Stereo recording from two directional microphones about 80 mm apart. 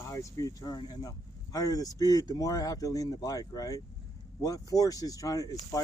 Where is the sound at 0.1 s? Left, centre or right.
Left.